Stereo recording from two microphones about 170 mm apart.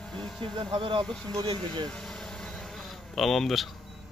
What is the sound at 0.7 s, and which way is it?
Speech, 30° right (ahead or behind).